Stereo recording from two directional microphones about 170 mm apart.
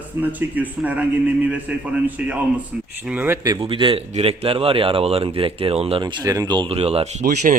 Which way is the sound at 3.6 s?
30° right (ahead or behind).